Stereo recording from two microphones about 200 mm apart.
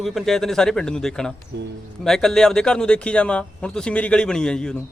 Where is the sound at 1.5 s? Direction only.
55° right (ahead or behind).